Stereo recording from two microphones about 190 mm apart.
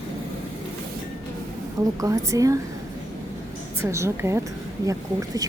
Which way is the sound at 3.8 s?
15° right (ahead or behind).